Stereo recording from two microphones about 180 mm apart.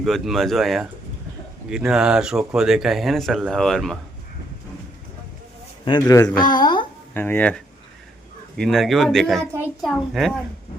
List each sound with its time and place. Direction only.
0.0 s speech: centre (ahead or behind)
5.8 s a man's voice: 20° left (ahead or behind)
7.1 s speech: 10° left (ahead or behind)